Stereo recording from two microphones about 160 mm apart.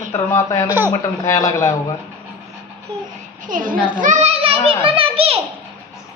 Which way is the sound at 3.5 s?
55° right (ahead or behind).